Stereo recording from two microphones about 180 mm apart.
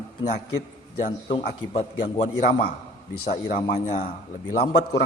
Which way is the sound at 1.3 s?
35° left (ahead or behind).